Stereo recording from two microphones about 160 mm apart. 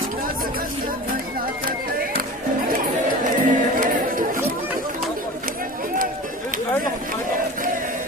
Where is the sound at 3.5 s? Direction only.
60° right (ahead or behind).